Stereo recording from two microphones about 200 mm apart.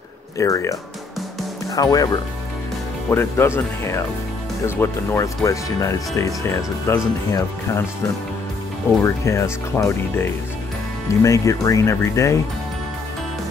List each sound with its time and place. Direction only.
0.4 s speech: 15° left (ahead or behind)
1.8 s speech: 20° left (ahead or behind)
9.0 s speech: 15° left (ahead or behind)